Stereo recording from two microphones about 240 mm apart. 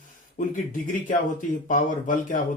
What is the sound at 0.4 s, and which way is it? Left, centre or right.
Speech, left.